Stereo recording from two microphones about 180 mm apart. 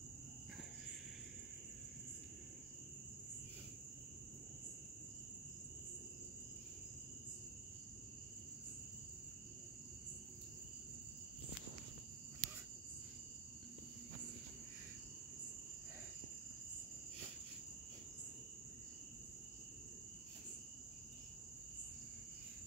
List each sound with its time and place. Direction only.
12.4 s cricket: 25° right (ahead or behind)